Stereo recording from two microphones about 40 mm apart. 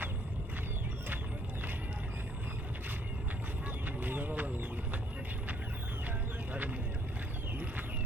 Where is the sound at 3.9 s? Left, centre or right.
Right.